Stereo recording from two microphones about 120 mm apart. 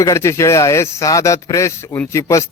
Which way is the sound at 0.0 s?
25° left (ahead or behind).